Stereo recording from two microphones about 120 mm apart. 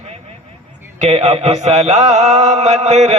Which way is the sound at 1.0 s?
65° right (ahead or behind).